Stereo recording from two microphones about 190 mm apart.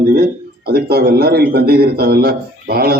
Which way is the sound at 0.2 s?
55° right (ahead or behind).